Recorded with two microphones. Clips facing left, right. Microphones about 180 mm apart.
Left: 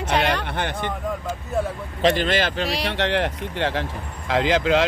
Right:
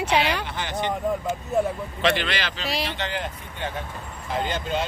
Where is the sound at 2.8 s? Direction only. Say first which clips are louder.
Left 6 dB; 65° left (ahead or behind).